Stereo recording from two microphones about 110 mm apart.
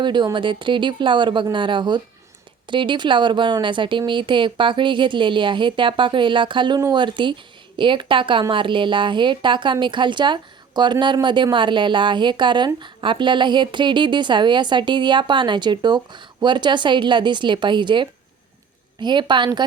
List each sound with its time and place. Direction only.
0.0 s a woman's voice: 45° right (ahead or behind)